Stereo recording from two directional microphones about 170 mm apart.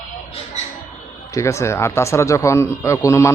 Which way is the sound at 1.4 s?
15° left (ahead or behind).